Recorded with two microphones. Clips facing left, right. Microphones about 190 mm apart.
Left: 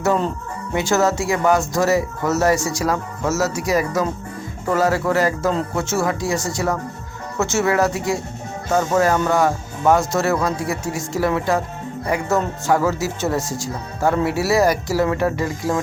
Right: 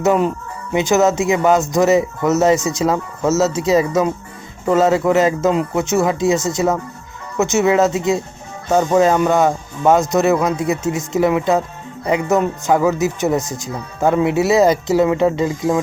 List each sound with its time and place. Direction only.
0.0 s speech: 15° right (ahead or behind)